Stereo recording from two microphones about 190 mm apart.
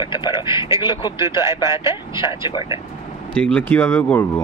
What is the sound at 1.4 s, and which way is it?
Speech, 15° right (ahead or behind).